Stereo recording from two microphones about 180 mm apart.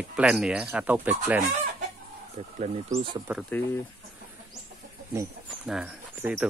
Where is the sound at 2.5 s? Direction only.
40° right (ahead or behind).